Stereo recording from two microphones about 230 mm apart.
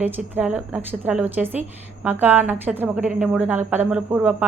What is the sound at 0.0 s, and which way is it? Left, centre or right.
A woman's voice, centre.